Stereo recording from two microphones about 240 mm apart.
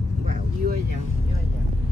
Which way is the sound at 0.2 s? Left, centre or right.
Right.